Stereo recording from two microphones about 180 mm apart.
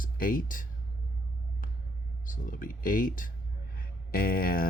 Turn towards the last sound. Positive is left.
turn(degrees=55)  # may be behind; listen again after turning